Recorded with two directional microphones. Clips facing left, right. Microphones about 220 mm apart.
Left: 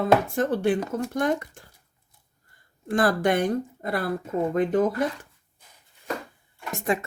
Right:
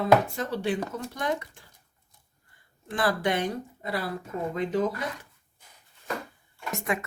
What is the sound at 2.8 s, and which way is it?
Speech, 45° left (ahead or behind).